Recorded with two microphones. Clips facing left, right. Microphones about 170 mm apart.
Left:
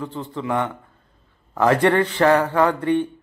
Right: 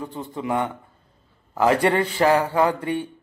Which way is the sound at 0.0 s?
15° right (ahead or behind).